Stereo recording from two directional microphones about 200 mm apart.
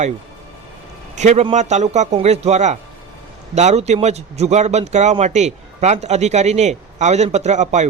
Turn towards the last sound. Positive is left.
turn(degrees=-35)  # may be behind; listen again after turning